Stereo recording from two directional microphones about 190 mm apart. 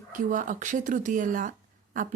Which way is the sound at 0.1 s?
40° right (ahead or behind).